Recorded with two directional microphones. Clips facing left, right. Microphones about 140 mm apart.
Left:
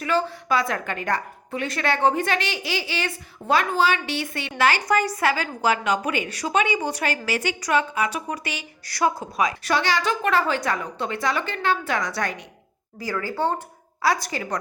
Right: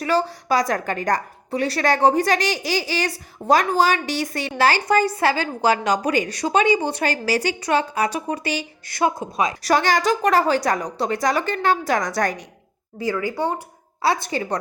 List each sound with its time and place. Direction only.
0.0 s a woman's voice: 35° right (ahead or behind)
8.9 s a woman's voice: 20° right (ahead or behind)
9.6 s a woman's voice: 45° right (ahead or behind)
13.0 s speech: 20° right (ahead or behind)
14.0 s a woman's voice: 25° right (ahead or behind)